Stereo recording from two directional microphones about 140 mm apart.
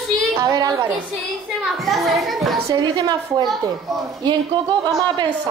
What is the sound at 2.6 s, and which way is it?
A woman's voice, 25° right (ahead or behind).